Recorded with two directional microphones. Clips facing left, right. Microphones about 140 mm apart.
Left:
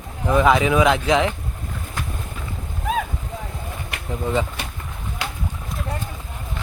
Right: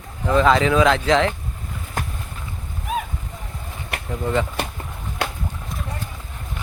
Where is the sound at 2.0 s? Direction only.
45° right (ahead or behind).